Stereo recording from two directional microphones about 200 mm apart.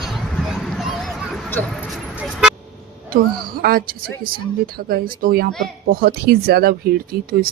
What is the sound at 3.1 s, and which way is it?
Speech, 45° right (ahead or behind).